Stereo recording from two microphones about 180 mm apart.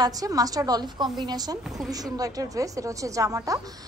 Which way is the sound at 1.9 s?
20° right (ahead or behind).